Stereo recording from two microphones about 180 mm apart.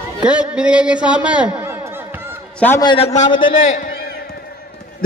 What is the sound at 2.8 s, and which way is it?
Speech, 30° left (ahead or behind).